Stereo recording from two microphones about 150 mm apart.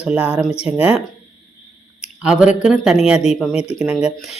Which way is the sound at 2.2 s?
5° right (ahead or behind).